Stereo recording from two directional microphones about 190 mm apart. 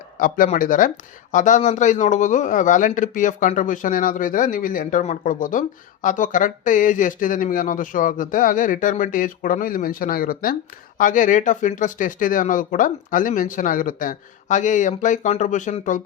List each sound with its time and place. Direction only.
0.2 s a man's voice: 45° left (ahead or behind)